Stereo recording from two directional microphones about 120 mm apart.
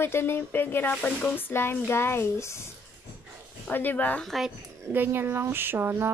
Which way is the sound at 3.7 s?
15° left (ahead or behind).